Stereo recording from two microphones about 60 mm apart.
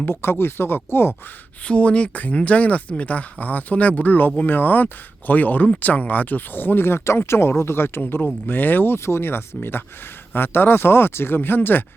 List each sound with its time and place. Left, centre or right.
0.0 s speech: left
1.6 s speech: centre; by 11.9 s left